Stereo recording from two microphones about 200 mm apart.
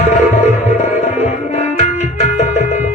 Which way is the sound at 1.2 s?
35° left (ahead or behind).